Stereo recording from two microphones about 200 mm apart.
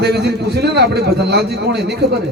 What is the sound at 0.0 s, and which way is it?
A man's voice, 55° right (ahead or behind).